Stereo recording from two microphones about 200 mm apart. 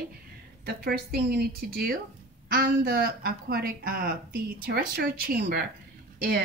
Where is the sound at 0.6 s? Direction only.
50° right (ahead or behind).